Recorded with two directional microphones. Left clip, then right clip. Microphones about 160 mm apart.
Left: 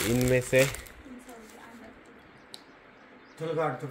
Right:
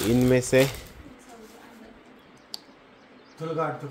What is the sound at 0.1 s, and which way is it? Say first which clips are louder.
Speech: right 4 dB; 30° right (ahead or behind).